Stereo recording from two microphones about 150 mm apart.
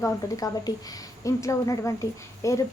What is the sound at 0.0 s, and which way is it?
A woman's voice, 25° left (ahead or behind).